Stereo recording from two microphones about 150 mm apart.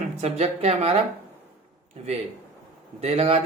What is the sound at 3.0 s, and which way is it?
Speech, 45° right (ahead or behind).